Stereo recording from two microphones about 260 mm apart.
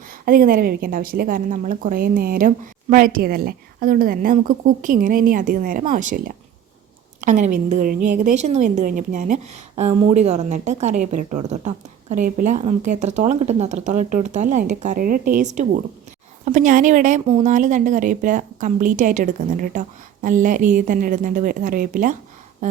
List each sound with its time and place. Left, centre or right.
0.1 s a woman's voice: right